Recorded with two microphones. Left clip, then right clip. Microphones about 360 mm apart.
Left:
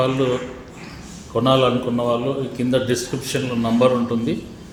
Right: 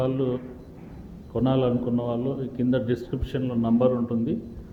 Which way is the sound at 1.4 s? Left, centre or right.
Right.